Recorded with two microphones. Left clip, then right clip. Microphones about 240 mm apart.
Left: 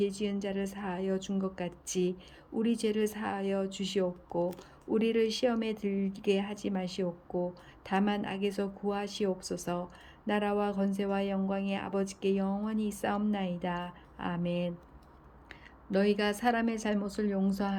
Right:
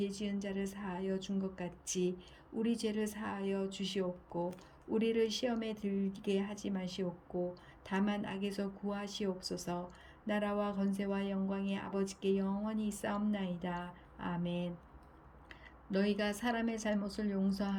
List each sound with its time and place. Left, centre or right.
0.0 s speech: centre
4.3 s speech: left
4.9 s speech: centre